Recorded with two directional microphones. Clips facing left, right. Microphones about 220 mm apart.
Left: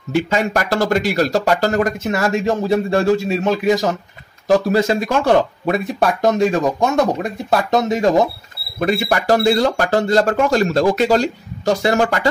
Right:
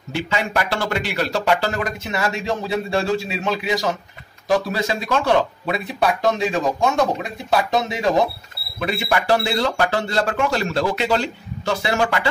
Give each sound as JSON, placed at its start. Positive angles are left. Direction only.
{"t": 0.1, "sound": "speech", "side_deg": 45}